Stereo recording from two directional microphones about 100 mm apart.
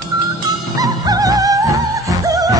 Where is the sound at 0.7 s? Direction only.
40° right (ahead or behind).